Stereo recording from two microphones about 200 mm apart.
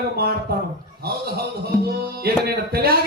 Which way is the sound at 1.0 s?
50° right (ahead or behind).